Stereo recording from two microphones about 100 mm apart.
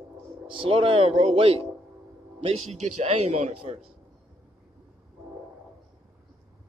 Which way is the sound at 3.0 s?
90° right.